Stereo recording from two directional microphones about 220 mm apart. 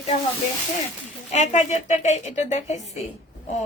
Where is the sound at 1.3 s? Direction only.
35° left (ahead or behind).